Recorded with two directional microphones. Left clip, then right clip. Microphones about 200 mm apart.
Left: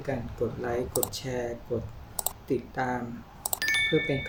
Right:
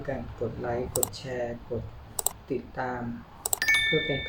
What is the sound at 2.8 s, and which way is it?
Speech, 45° left (ahead or behind).